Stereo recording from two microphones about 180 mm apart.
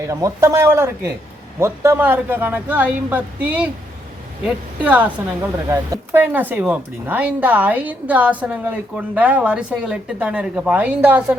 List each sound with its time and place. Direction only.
0.0 s speech: 15° right (ahead or behind)
4.8 s speech: 10° right (ahead or behind)